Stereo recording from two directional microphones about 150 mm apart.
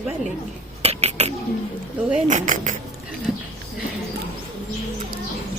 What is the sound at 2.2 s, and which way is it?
Speech, 55° right (ahead or behind).